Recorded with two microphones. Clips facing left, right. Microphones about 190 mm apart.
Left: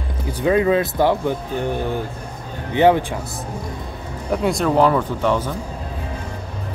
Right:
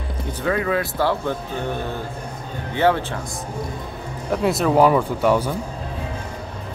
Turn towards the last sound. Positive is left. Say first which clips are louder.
# right 1 dB
turn(degrees=-10)  # may be behind; listen again after turning